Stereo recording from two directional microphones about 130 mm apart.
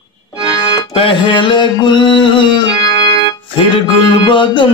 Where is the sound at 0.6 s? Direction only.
30° left (ahead or behind).